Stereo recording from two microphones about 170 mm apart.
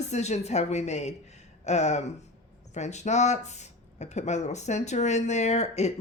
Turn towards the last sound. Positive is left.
turn(degrees=40)  # may be behind; listen again after turning